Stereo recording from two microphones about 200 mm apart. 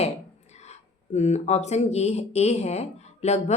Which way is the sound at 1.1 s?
35° left (ahead or behind).